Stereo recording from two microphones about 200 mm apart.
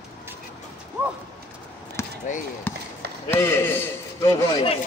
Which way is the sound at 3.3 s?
10° left (ahead or behind).